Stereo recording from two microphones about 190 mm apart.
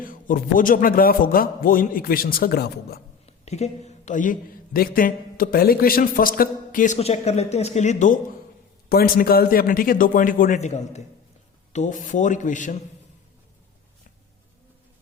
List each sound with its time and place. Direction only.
0.0 s speech: 45° left (ahead or behind)
3.2 s speech: 35° left (ahead or behind)
8.9 s speech: 50° left (ahead or behind)